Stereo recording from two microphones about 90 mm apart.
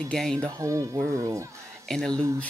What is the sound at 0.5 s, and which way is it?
Speech, 35° right (ahead or behind).